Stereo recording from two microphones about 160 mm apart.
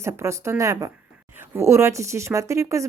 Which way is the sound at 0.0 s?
15° right (ahead or behind).